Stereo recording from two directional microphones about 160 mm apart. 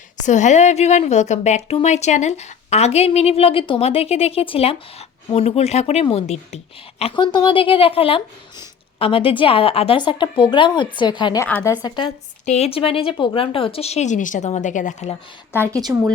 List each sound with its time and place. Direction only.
0.3 s speech: 50° left (ahead or behind)
7.0 s speech: 30° left (ahead or behind)
11.4 s a woman's voice: 10° left (ahead or behind)
11.8 s a woman's voice: 25° left (ahead or behind)
12.5 s speech: 40° left (ahead or behind)
15.5 s speech: 15° right (ahead or behind)